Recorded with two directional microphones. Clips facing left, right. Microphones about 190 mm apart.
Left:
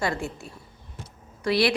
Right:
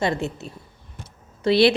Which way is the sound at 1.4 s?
25° right (ahead or behind).